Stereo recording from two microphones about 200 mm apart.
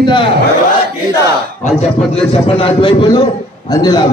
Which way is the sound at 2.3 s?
30° left (ahead or behind).